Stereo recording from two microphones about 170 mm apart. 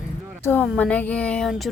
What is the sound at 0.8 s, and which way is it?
Speech, 10° left (ahead or behind).